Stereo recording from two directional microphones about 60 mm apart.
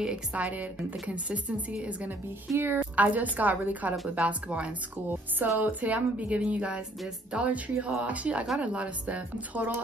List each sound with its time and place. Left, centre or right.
0.3 s speech: right
2.5 s a woman's voice: right
3.0 s speech: right